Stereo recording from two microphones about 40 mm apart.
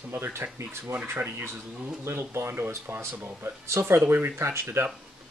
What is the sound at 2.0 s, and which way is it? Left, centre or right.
Speech, right.